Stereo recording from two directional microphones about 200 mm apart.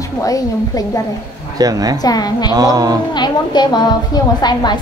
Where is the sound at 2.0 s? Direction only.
20° left (ahead or behind).